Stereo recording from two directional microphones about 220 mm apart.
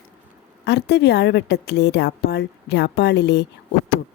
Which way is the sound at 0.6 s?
50° left (ahead or behind).